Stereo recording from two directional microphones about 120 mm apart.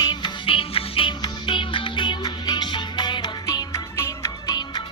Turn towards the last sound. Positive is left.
turn(degrees=35)  # may be behind; listen again after turning